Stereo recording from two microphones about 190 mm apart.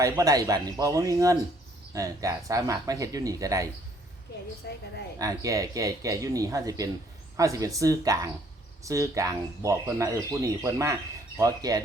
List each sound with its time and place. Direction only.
0.0 s speech: 15° right (ahead or behind)
4.6 s a woman's voice: 60° left (ahead or behind)
5.2 s speech: 20° right (ahead or behind)